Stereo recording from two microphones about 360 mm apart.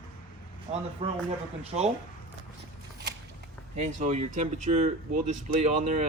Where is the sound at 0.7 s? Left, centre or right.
Centre.